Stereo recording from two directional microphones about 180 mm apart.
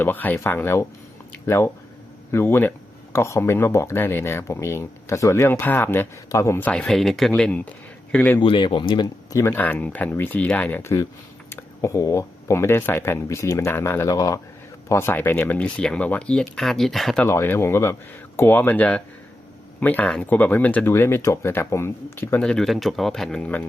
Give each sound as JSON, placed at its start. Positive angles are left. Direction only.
{"t": 0.0, "sound": "speech", "side_deg": 10}
{"t": 8.4, "sound": "speech", "side_deg": 25}
{"t": 17.2, "sound": "speech", "side_deg": 15}